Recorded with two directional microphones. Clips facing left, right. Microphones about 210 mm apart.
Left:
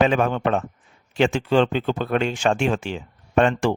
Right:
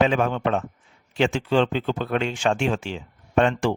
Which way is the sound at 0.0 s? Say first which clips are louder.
Left 2 dB; 50° left (ahead or behind).